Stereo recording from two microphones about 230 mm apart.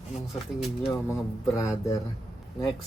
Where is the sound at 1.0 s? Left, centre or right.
Centre.